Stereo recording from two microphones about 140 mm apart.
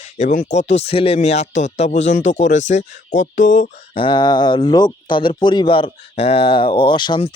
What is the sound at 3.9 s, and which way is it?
Speech, 35° left (ahead or behind).